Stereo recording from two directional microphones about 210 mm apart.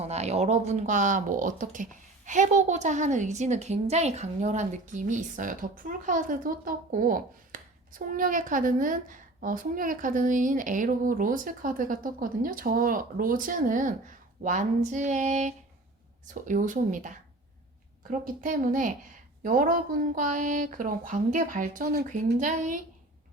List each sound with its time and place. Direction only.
0.0 s speech: 30° right (ahead or behind)
18.3 s speech: 40° right (ahead or behind)